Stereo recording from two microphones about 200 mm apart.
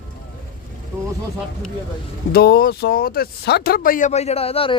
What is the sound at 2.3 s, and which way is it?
Speech, 50° left (ahead or behind).